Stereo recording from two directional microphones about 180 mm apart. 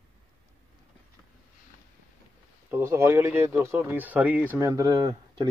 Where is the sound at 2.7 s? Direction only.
15° right (ahead or behind).